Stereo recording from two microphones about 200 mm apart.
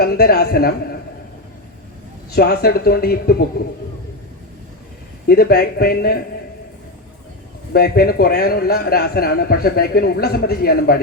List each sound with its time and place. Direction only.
0.0 s a man's voice: 50° left (ahead or behind)
2.3 s a man's voice: 50° left (ahead or behind)
5.3 s a man's voice: 50° left (ahead or behind)
7.7 s a man's voice: 50° left (ahead or behind)